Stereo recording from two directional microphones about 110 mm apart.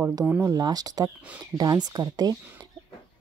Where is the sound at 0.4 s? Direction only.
35° right (ahead or behind).